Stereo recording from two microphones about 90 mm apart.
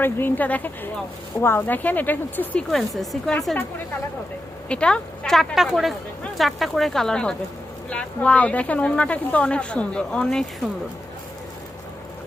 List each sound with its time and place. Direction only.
0.0 s speech: 25° left (ahead or behind)
2.6 s speech: centre (ahead or behind)
4.7 s speech: 10° left (ahead or behind)